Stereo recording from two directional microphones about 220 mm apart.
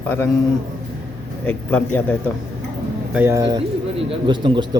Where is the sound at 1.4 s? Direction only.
5° left (ahead or behind).